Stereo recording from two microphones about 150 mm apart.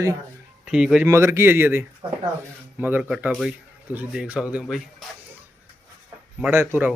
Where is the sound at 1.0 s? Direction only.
20° right (ahead or behind).